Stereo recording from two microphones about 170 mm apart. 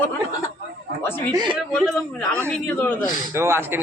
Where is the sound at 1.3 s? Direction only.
25° right (ahead or behind).